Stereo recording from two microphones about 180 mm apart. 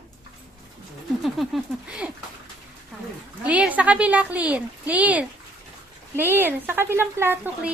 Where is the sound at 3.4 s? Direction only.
10° right (ahead or behind).